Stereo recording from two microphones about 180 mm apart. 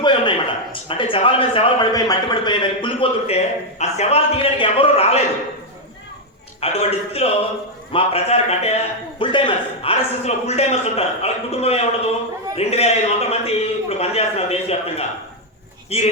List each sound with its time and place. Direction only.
0.0 s a man's voice: 25° left (ahead or behind)
6.6 s a man's voice: 35° left (ahead or behind)